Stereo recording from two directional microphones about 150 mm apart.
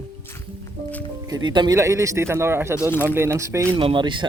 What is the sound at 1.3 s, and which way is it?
A man's voice, 30° right (ahead or behind).